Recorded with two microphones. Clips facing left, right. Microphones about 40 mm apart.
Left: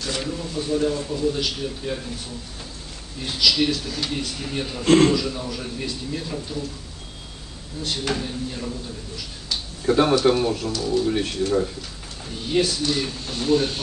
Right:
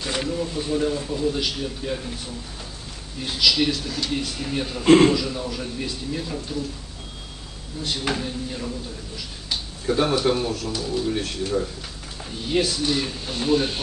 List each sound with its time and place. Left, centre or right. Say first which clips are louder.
0.0 s a sound: right 1 dB; centre
0.3 s a man's voice: left 1 dB; centre
3.2 s a man's voice: even; centre
7.8 s a man's voice: even; centre
9.8 s a man's voice: left 3 dB; centre
12.4 s speech: left 1 dB; centre